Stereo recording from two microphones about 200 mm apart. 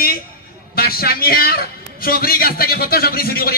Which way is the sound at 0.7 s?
50° left (ahead or behind).